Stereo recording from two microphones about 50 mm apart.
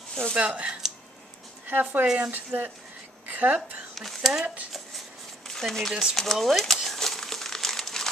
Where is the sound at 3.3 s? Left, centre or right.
Right.